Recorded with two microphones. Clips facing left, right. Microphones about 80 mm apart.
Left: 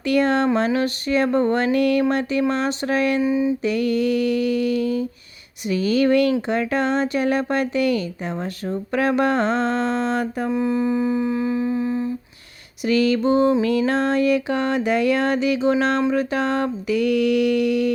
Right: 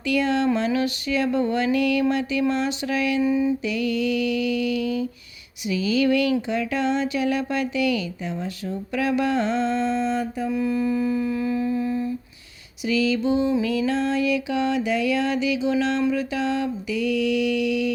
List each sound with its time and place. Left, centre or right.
0.1 s mantra: left
3.2 s humming: left
3.6 s mantra: left
10.5 s humming: left
12.8 s mantra: left